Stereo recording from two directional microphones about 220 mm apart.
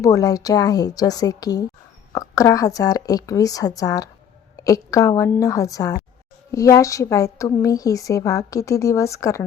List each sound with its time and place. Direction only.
0.0 s a woman's voice: 15° left (ahead or behind)